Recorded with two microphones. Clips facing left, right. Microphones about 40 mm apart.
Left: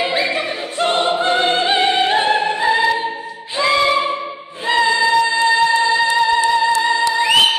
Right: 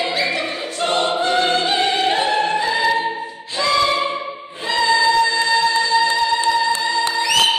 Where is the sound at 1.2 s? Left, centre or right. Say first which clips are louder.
Left 2 dB; left.